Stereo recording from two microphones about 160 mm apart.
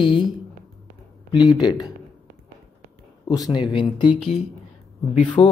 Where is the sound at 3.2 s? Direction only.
25° left (ahead or behind).